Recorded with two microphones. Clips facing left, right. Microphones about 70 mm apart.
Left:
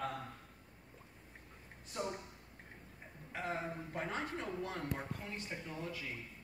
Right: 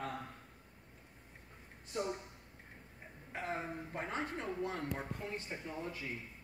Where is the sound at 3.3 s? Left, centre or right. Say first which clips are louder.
Even; right.